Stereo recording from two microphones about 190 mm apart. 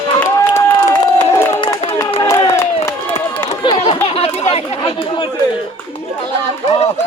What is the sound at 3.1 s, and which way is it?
Chatter, 30° left (ahead or behind).